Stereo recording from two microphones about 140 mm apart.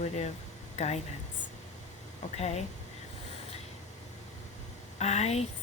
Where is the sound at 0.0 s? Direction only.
55° left (ahead or behind).